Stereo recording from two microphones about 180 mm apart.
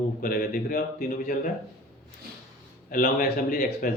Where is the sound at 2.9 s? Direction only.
50° left (ahead or behind).